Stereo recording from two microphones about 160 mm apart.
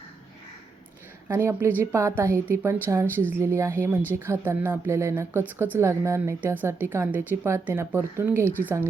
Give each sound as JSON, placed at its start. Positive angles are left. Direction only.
{"t": 1.3, "sound": "speech", "side_deg": -15}